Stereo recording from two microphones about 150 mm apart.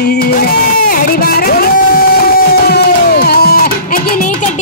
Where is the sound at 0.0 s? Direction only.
90° left.